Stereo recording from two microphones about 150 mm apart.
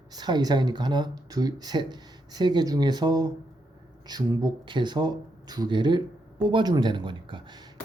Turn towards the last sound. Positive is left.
turn(degrees=-30)  # may be behind; listen again after turning